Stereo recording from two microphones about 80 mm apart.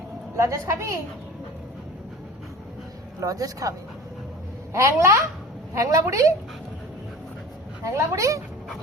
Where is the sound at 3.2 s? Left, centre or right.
Right.